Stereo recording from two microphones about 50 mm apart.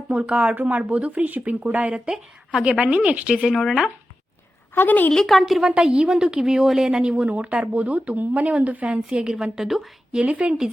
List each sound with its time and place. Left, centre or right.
0.1 s speech: right
2.0 s speech: centre
3.5 s speech: centre
4.7 s a woman's voice: left
5.1 s speech: centre
5.6 s a woman's voice: centre
7.2 s speech: right
9.0 s a woman's voice: centre